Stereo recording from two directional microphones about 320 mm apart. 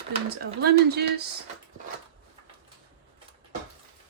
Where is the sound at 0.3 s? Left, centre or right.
Right.